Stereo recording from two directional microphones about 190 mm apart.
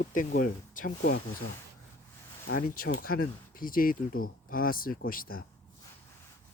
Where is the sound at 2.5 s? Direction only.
50° left (ahead or behind).